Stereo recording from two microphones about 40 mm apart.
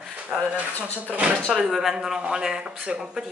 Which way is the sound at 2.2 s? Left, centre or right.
Right.